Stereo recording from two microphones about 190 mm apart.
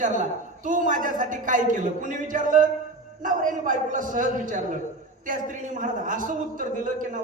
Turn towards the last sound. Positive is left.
turn(degrees=-40)  # may be behind; listen again after turning